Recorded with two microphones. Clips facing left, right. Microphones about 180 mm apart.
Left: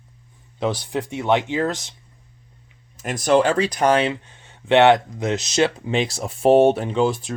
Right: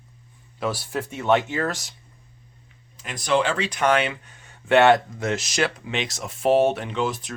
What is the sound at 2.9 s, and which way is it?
Speech, 45° left (ahead or behind).